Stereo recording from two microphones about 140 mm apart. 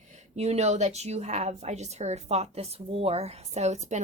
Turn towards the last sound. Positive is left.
turn(degrees=-55)  # may be behind; listen again after turning